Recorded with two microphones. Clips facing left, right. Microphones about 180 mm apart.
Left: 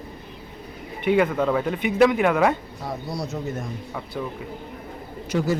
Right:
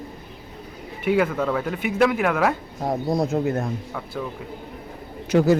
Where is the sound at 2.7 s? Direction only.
45° right (ahead or behind); by 3.7 s 60° right (ahead or behind).